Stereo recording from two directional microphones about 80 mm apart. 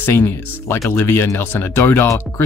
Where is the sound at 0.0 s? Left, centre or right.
Left.